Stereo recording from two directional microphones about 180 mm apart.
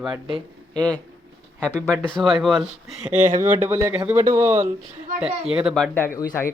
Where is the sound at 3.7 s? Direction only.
15° right (ahead or behind).